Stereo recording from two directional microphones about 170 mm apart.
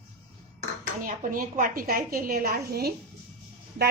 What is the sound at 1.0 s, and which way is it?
A woman's voice, 55° right (ahead or behind).